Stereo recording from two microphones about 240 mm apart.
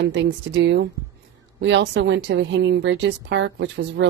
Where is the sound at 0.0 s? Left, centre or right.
Right.